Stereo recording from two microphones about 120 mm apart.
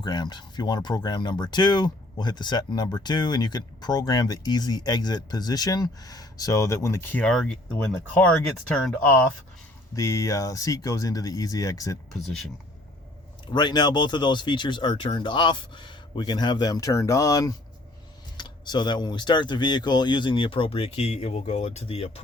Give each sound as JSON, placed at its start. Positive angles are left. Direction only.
{"t": 0.0, "sound": "speech", "side_deg": 35}
{"t": 7.3, "sound": "speech", "side_deg": 5}
{"t": 9.9, "sound": "speech", "side_deg": 25}
{"t": 13.5, "sound": "speech", "side_deg": 35}